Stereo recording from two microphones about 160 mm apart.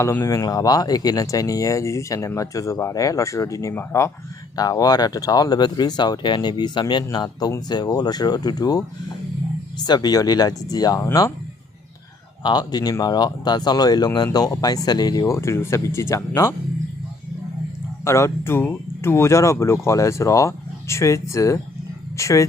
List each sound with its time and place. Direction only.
0.0 s speech: 15° left (ahead or behind)
9.8 s speech: 25° left (ahead or behind)
12.4 s speech: 25° left (ahead or behind)
18.0 s speech: 20° left (ahead or behind)